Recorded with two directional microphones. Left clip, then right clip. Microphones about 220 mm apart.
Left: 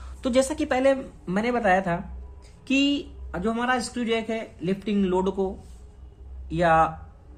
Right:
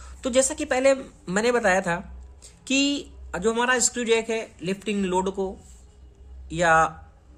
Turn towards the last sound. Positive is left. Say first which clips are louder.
# right 1 dB
turn(degrees=-20)  # may be behind; listen again after turning